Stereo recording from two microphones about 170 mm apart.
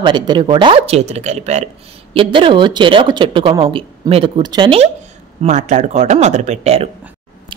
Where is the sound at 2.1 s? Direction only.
30° right (ahead or behind).